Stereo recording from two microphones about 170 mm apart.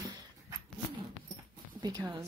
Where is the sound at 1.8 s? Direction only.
25° right (ahead or behind).